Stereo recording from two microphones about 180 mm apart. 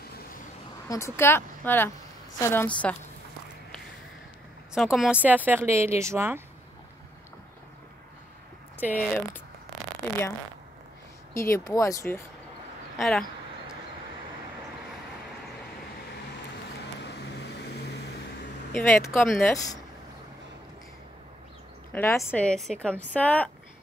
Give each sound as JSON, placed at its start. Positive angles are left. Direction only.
{"t": 0.8, "sound": "speech", "side_deg": 15}
{"t": 4.7, "sound": "speech", "side_deg": 0}
{"t": 8.8, "sound": "speech", "side_deg": -5}
{"t": 11.3, "sound": "speech", "side_deg": 15}
{"t": 12.9, "sound": "speech", "side_deg": 0}
{"t": 17.0, "sound": "vehicle", "side_deg": 70}
{"t": 18.8, "sound": "speech", "side_deg": 15}
{"t": 21.9, "sound": "speech", "side_deg": 10}